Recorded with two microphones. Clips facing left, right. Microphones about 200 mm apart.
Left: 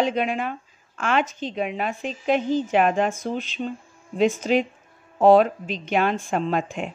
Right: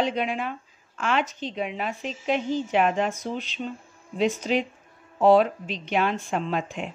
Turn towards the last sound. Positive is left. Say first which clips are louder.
# left 3 dB
turn(degrees=50)  # may be behind; listen again after turning